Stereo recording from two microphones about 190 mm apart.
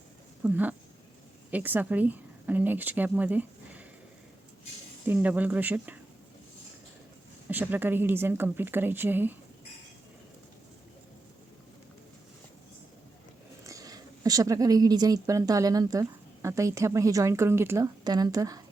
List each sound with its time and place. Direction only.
0.4 s a woman's voice: 10° right (ahead or behind)
5.0 s speech: 10° right (ahead or behind)
7.4 s speech: 10° right (ahead or behind)
13.7 s a woman's voice: 20° right (ahead or behind)